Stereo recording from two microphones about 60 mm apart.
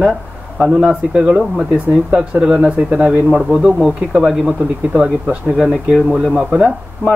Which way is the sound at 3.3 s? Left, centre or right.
Centre.